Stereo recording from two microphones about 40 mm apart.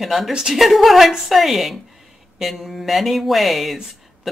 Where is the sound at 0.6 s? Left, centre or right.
Centre.